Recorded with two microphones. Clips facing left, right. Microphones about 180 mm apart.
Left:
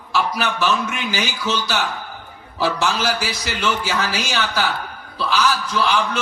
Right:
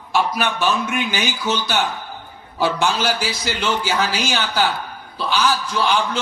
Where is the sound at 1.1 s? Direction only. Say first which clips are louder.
Right 1 dB; 25° right (ahead or behind).